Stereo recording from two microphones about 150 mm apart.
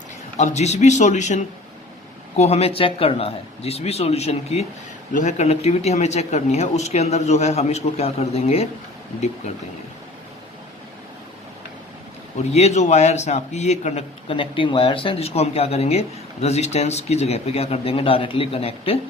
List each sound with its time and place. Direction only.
0.3 s a man's voice: 50° left (ahead or behind)
12.4 s a man's voice: 45° left (ahead or behind)